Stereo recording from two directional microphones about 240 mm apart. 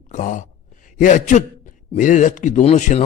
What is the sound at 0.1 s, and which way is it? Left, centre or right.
A man's voice, left.